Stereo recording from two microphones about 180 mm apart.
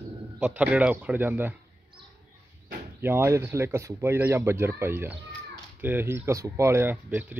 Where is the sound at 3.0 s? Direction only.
10° right (ahead or behind).